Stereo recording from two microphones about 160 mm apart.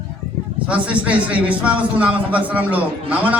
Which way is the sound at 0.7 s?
10° right (ahead or behind).